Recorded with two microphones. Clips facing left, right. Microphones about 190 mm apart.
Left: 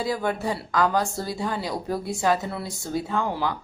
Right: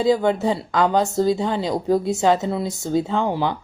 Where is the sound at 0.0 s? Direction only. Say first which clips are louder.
Right 8 dB; 20° right (ahead or behind).